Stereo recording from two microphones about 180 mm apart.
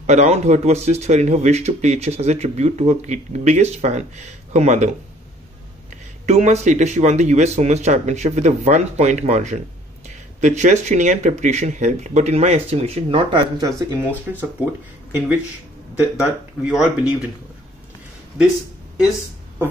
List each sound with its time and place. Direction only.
0.0 s speech: 40° right (ahead or behind)
6.2 s speech: 40° right (ahead or behind)
13.6 s speech: 20° right (ahead or behind)
16.3 s speech: 5° right (ahead or behind)